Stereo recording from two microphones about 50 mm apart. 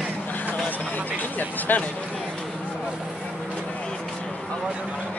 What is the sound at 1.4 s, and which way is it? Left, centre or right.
Speech, left.